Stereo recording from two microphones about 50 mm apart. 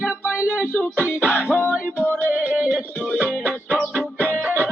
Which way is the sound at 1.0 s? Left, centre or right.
Left.